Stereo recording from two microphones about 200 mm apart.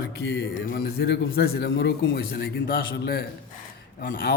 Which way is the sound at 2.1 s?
55° left (ahead or behind).